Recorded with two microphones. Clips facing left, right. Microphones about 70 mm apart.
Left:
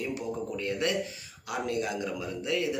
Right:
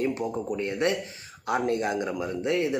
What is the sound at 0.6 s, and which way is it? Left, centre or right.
Speech, right.